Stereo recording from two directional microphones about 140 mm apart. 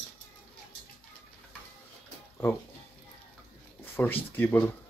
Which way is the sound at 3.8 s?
15° left (ahead or behind).